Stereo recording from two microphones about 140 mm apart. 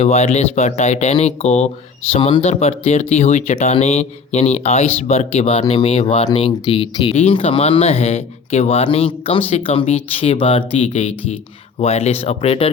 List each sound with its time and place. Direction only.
0.0 s speech: 50° left (ahead or behind)